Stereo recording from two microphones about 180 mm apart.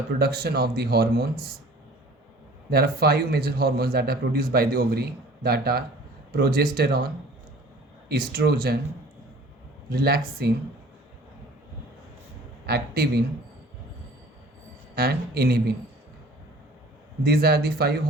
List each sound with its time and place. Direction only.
0.2 s a man's voice: 60° right (ahead or behind)
2.6 s a man's voice: 60° right (ahead or behind)
8.1 s a man's voice: 60° right (ahead or behind)
9.9 s a man's voice: 60° right (ahead or behind)
12.6 s a man's voice: 60° right (ahead or behind)
14.9 s a man's voice: 60° right (ahead or behind)
17.2 s a man's voice: 60° right (ahead or behind)